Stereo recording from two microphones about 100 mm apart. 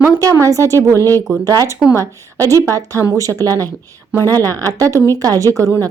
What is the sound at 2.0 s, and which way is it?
Speech, 35° right (ahead or behind).